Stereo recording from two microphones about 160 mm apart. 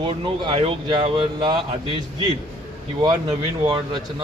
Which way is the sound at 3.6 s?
30° right (ahead or behind).